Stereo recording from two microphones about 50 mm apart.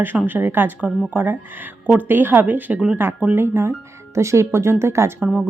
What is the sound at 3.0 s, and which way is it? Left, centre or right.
Speech, right.